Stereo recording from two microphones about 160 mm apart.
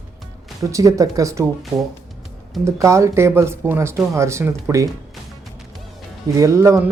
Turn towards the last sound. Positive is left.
turn(degrees=-20)  # may be behind; listen again after turning